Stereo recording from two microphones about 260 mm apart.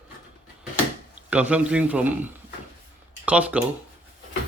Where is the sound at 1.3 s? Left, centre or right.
Centre.